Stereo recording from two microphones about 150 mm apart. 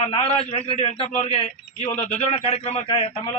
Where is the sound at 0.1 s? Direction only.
35° left (ahead or behind).